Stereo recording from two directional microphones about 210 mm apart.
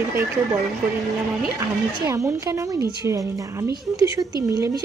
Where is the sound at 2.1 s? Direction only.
15° right (ahead or behind).